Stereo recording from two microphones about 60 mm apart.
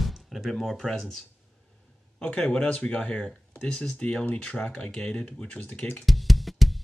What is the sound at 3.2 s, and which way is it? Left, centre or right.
Speech, centre.